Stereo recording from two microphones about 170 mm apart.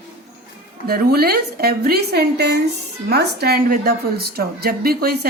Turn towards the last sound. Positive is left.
turn(degrees=-65)  # may be behind; listen again after turning